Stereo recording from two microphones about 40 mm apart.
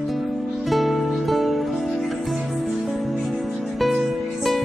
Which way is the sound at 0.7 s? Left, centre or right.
Centre.